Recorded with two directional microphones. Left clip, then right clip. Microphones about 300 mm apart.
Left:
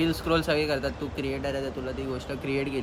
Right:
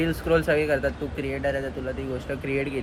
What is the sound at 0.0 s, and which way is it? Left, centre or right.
Speech, centre.